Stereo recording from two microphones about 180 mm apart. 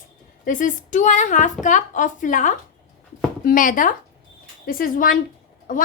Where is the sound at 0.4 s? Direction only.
45° left (ahead or behind).